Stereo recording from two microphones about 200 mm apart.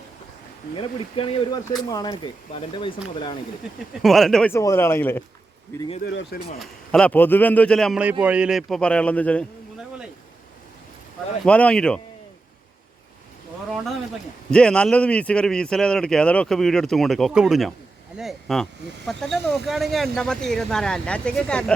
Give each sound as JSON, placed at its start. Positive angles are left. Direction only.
{"t": 0.8, "sound": "speech", "side_deg": 25}
{"t": 4.0, "sound": "speech", "side_deg": 0}
{"t": 4.5, "sound": "speech", "side_deg": 15}
{"t": 6.1, "sound": "speech", "side_deg": 65}
{"t": 6.9, "sound": "speech", "side_deg": 5}
{"t": 11.4, "sound": "speech", "side_deg": 5}
{"t": 14.5, "sound": "speech", "side_deg": 5}